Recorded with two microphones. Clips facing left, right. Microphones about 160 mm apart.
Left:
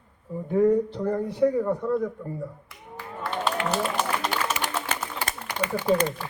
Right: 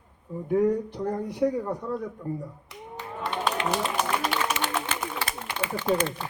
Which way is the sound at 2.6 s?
20° right (ahead or behind).